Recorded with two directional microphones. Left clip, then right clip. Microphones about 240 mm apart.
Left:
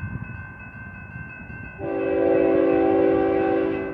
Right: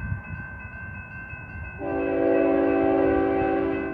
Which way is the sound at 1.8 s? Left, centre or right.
Left.